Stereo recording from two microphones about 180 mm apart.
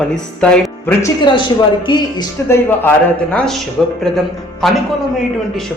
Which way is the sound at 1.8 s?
25° left (ahead or behind).